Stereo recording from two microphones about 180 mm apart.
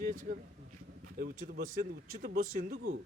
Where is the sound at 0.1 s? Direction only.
45° right (ahead or behind).